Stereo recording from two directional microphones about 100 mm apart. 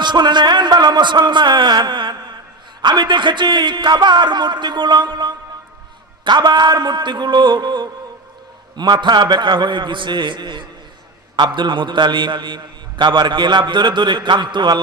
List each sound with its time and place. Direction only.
0.0 s a man's voice: 50° right (ahead or behind)